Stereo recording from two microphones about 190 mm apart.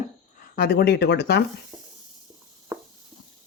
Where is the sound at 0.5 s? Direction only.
55° left (ahead or behind).